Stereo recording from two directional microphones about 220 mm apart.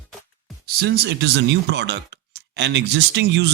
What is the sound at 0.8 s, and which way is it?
Speech, 45° right (ahead or behind).